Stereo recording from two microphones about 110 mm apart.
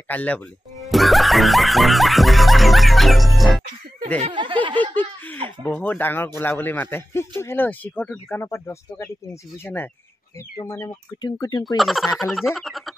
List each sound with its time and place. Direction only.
0.1 s speech: 15° left (ahead or behind)
0.7 s music: centre (ahead or behind)
4.3 s snicker: 50° right (ahead or behind)
4.9 s speech: 15° left (ahead or behind)
10.6 s speech: 30° left (ahead or behind)
11.6 s frog: centre (ahead or behind)